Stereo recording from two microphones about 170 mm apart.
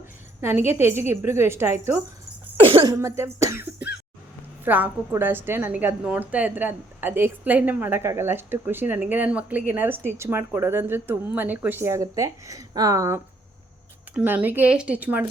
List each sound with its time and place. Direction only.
0.4 s a woman's voice: 15° right (ahead or behind)
2.6 s a sound: 35° right (ahead or behind)
3.0 s cough: 15° right (ahead or behind)
4.6 s a woman's voice: 10° right (ahead or behind)